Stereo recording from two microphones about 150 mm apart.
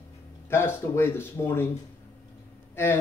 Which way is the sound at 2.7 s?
15° left (ahead or behind).